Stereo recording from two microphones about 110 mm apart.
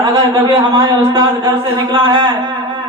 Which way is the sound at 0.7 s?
40° right (ahead or behind).